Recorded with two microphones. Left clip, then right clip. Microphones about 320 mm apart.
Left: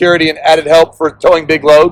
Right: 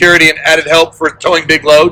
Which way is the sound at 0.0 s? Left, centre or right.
Centre.